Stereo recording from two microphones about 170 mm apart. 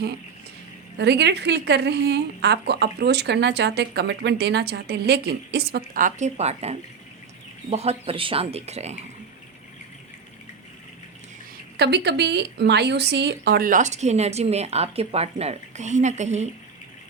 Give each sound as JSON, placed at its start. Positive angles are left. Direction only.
{"t": 0.9, "sound": "a woman's voice", "side_deg": -80}
{"t": 11.8, "sound": "speech", "side_deg": -80}